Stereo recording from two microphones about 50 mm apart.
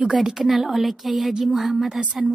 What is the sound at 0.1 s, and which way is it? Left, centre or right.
A woman's voice, centre.